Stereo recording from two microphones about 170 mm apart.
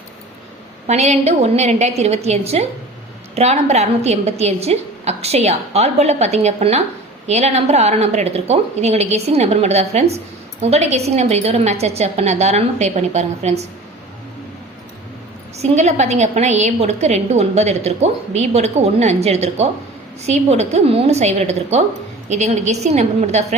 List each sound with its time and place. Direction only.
0.9 s a woman's voice: 40° right (ahead or behind)
15.5 s a woman's voice: 40° right (ahead or behind)